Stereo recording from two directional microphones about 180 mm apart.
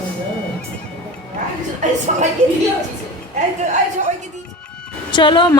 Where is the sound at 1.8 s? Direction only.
40° right (ahead or behind).